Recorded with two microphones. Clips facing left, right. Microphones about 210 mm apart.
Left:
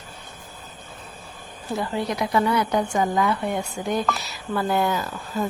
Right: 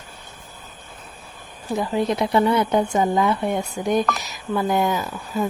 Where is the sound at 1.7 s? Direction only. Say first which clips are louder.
Right 4 dB; 20° right (ahead or behind).